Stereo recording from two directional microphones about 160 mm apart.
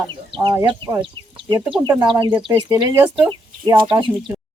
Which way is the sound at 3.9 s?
30° right (ahead or behind).